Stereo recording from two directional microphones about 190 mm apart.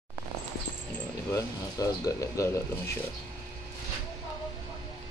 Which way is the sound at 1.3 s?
15° left (ahead or behind).